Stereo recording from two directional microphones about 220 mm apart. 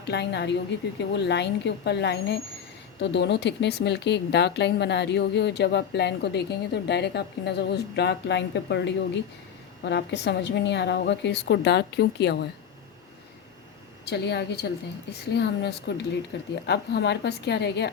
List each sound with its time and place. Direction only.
0.0 s speech: 50° left (ahead or behind)
14.0 s speech: 50° left (ahead or behind)